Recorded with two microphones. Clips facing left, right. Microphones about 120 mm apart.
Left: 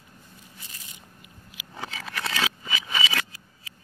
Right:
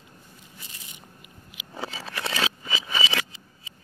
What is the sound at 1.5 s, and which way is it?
Scissors, 30° right (ahead or behind).